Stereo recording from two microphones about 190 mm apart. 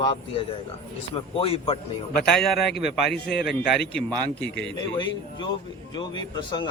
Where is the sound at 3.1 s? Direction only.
60° left (ahead or behind).